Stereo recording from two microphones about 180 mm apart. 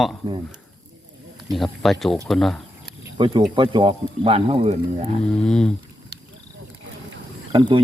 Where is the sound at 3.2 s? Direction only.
25° right (ahead or behind).